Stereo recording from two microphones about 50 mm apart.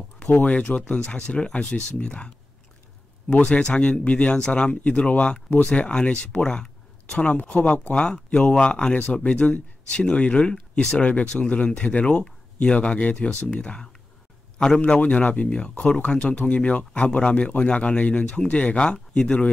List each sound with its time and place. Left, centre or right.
0.2 s speech: left
3.4 s speech: centre